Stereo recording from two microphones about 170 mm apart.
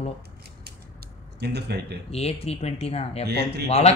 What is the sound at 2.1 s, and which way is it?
Speech, 35° left (ahead or behind).